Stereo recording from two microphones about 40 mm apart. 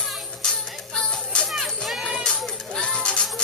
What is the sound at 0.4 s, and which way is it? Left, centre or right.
Music, left.